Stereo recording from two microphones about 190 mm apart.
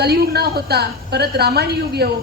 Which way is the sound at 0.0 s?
55° right (ahead or behind).